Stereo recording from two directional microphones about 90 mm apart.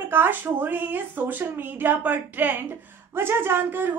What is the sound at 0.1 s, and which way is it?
A woman's voice, 25° right (ahead or behind).